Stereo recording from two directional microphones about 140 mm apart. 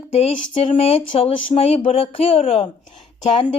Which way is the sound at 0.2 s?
45° left (ahead or behind).